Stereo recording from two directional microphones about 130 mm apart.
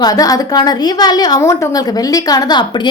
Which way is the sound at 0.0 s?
30° left (ahead or behind).